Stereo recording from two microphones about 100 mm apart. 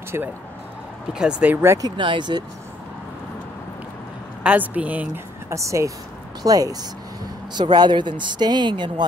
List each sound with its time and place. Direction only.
0.1 s speech: 25° right (ahead or behind)
1.1 s speech: 10° right (ahead or behind)
1.8 s speech: 50° right (ahead or behind)
4.4 s speech: 15° right (ahead or behind)
5.5 s speech: 30° right (ahead or behind); by 9.0 s 50° right (ahead or behind)